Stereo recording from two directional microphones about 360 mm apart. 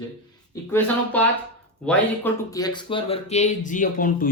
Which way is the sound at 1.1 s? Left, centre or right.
Centre.